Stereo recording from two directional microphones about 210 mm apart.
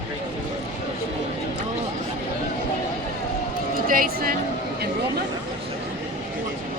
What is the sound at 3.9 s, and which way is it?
Speech, 45° right (ahead or behind).